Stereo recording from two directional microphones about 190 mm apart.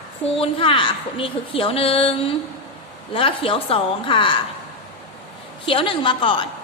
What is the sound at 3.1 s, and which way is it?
A woman's voice, 30° left (ahead or behind).